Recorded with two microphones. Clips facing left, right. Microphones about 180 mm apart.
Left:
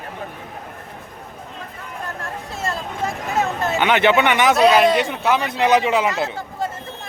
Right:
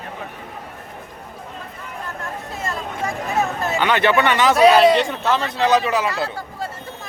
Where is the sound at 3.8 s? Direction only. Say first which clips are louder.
Left 1 dB; 20° left (ahead or behind).